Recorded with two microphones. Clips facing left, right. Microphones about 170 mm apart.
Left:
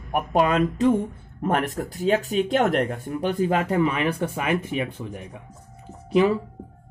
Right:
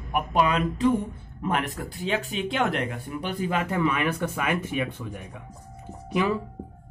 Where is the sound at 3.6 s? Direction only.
30° left (ahead or behind).